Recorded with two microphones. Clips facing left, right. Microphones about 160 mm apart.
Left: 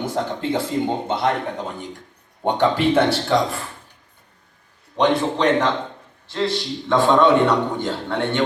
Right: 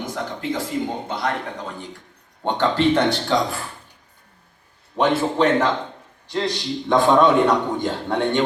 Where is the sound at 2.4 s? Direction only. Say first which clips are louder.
Left 1 dB; 10° left (ahead or behind).